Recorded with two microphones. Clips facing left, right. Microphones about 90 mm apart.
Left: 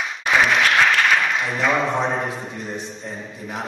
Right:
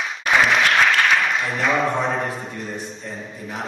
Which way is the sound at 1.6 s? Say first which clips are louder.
Even; 15° left (ahead or behind).